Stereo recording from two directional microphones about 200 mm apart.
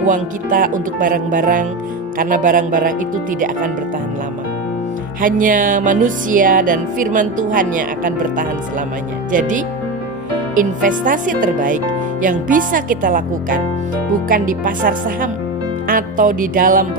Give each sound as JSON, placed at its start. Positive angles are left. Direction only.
{"t": 0.1, "sound": "music", "side_deg": -40}
{"t": 2.1, "sound": "speech", "side_deg": -40}
{"t": 5.2, "sound": "music", "side_deg": -45}
{"t": 14.3, "sound": "speech", "side_deg": -40}